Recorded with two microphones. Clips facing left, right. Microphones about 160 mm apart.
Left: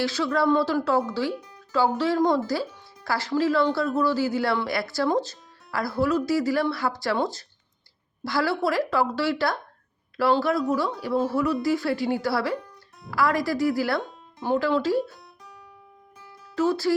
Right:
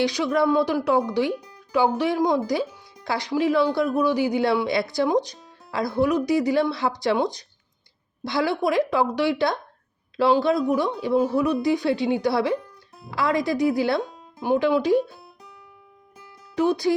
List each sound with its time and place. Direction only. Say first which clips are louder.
0.0 s speech: right 2 dB; 15° right (ahead or behind)
16.6 s speech: right 2 dB; 15° right (ahead or behind)